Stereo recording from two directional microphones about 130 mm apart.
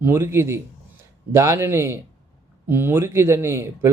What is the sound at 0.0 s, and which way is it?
Speech, 20° right (ahead or behind).